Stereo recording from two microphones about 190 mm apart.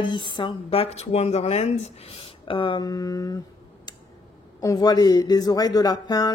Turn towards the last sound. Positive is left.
turn(degrees=20)  # may be behind; listen again after turning